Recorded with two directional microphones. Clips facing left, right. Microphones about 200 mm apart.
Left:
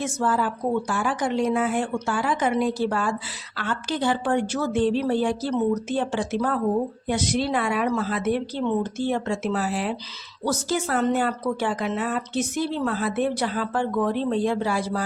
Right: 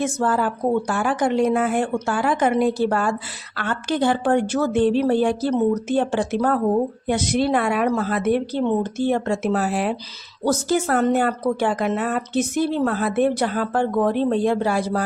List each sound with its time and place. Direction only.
0.0 s speech: 55° right (ahead or behind)